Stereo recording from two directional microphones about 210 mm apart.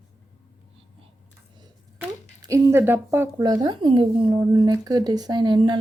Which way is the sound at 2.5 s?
10° right (ahead or behind).